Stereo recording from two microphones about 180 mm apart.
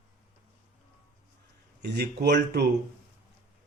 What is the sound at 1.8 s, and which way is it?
Speech, 65° right (ahead or behind).